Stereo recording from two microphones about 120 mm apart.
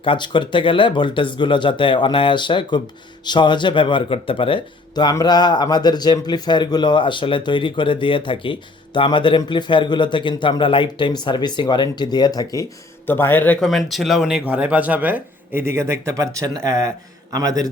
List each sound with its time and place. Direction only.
0.0 s a man's voice: 45° left (ahead or behind)
13.1 s speech: 15° left (ahead or behind)
13.6 s a man's voice: centre (ahead or behind); by 16.9 s 25° right (ahead or behind)